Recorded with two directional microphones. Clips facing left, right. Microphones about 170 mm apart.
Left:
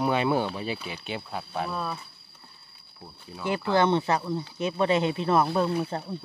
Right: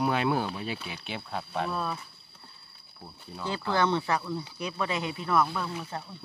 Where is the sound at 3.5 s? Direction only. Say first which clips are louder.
Left 4 dB; 20° left (ahead or behind); by 6.1 s 35° left (ahead or behind).